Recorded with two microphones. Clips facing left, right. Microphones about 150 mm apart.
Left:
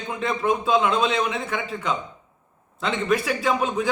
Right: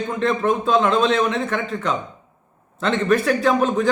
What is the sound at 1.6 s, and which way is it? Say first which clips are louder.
Speech: right 4 dB; 45° right (ahead or behind).